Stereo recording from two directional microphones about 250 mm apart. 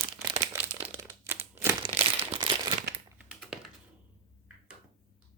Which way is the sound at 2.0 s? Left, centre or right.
Right.